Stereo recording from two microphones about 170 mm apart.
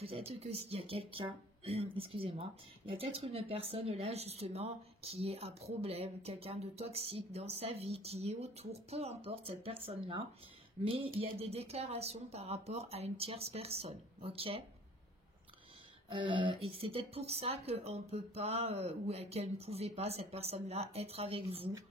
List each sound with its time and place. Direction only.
0.3 s speech: 35° right (ahead or behind)
16.1 s speech: 30° right (ahead or behind)